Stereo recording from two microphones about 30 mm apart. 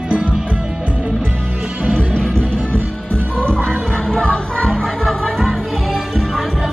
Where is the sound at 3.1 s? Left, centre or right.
Left.